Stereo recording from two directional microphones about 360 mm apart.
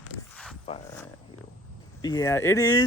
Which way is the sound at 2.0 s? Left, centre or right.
Centre.